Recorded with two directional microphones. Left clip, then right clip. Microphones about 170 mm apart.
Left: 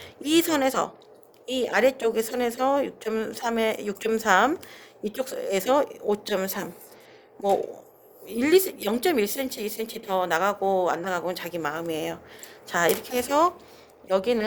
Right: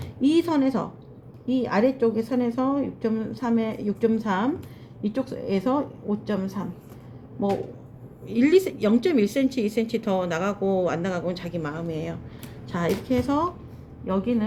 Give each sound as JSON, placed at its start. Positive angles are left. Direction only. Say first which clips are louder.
{"t": 0.2, "sound": "a woman's voice", "louder": "right 1 dB", "side_deg": 55}
{"t": 5.0, "sound": "a woman's voice", "louder": "even", "side_deg": 90}
{"t": 8.3, "sound": "speech", "louder": "right 1 dB", "side_deg": 45}